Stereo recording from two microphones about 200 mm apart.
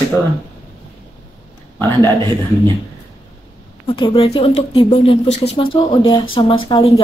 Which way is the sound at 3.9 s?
25° left (ahead or behind).